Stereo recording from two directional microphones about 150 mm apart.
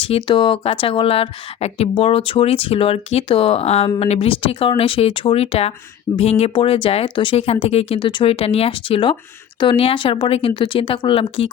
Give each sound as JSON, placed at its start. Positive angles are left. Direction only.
{"t": 0.0, "sound": "speech", "side_deg": 40}
{"t": 6.1, "sound": "speech", "side_deg": 25}
{"t": 6.4, "sound": "speech", "side_deg": 40}